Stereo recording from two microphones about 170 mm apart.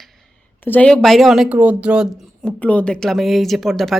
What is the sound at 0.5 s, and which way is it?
A woman's voice, 10° left (ahead or behind).